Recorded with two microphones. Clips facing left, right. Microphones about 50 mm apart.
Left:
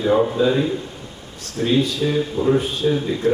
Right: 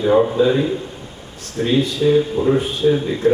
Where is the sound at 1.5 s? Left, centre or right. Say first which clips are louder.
Right 1 dB; right.